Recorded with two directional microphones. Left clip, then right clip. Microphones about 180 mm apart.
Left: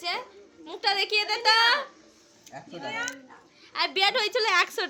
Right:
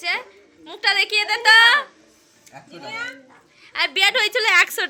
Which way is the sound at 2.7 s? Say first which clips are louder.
Right 2 dB; 45° right (ahead or behind).